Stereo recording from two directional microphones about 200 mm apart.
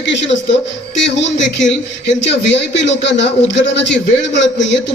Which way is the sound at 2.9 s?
65° left (ahead or behind).